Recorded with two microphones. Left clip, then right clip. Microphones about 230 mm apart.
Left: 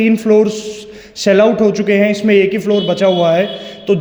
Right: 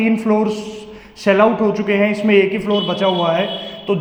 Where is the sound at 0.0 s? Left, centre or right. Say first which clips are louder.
Left 6 dB; left.